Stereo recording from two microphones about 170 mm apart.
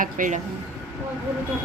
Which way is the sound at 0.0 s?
50° right (ahead or behind).